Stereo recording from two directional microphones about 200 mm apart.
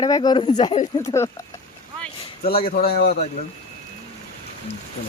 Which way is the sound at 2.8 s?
50° left (ahead or behind).